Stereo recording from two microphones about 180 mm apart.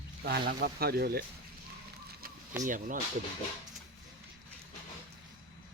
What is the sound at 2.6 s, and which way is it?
Speech, 45° right (ahead or behind).